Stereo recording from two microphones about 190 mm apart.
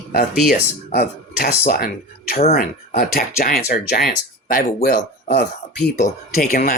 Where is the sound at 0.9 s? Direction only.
55° left (ahead or behind).